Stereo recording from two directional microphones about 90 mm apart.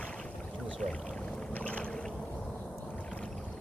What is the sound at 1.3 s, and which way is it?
Boat, 15° left (ahead or behind).